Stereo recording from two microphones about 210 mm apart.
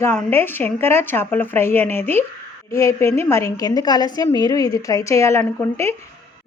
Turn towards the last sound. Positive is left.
turn(degrees=10)  # may be behind; listen again after turning